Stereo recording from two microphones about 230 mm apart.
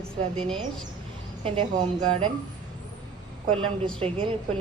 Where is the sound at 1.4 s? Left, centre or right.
Right.